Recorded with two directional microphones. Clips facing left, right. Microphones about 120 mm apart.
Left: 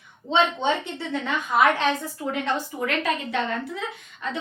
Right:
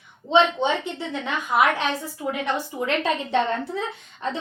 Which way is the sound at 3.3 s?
35° right (ahead or behind).